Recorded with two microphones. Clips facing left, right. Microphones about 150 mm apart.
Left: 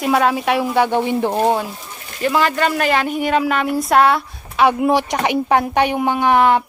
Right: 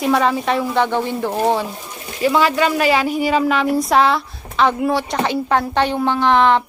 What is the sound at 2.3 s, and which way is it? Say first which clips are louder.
Speech: right 1 dB; 5° right (ahead or behind).